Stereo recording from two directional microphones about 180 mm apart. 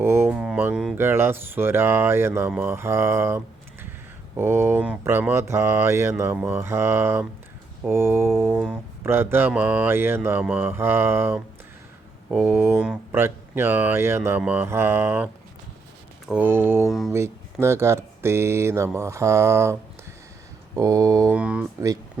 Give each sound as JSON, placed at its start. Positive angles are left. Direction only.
{"t": 0.0, "sound": "mantra", "side_deg": -15}
{"t": 20.7, "sound": "mantra", "side_deg": -20}
{"t": 21.3, "sound": "mantra", "side_deg": -5}